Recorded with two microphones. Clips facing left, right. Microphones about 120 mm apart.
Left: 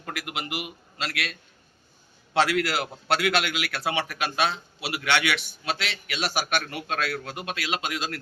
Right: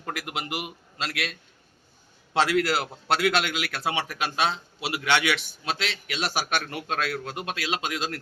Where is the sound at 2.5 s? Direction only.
30° right (ahead or behind).